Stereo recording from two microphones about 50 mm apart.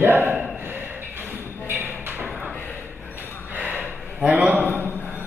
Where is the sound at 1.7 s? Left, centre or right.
Right.